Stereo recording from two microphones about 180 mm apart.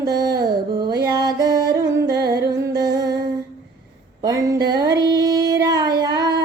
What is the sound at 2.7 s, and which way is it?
Music, 20° right (ahead or behind).